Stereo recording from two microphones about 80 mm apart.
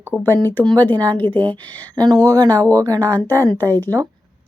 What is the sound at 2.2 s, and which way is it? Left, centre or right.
Speech, right.